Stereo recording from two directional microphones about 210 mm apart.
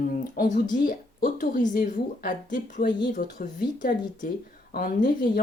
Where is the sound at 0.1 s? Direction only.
40° left (ahead or behind).